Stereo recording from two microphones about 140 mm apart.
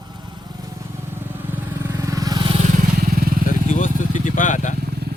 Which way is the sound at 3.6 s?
65° left (ahead or behind).